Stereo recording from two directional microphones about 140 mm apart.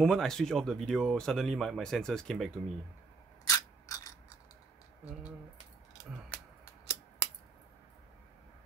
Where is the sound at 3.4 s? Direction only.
25° left (ahead or behind).